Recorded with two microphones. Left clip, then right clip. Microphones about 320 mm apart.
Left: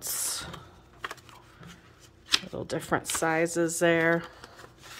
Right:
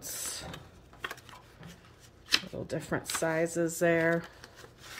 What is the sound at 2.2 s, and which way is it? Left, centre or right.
Speech, centre.